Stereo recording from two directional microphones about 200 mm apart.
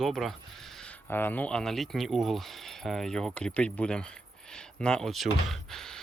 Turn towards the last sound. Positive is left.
turn(degrees=0)  # may be behind; listen again after turning